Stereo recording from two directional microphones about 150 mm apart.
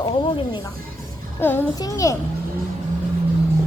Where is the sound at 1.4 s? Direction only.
15° left (ahead or behind).